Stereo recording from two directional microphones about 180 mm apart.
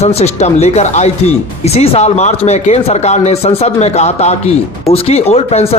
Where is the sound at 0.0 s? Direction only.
35° left (ahead or behind).